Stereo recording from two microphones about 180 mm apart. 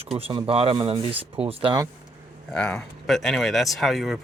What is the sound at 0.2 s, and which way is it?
Speech, 30° right (ahead or behind).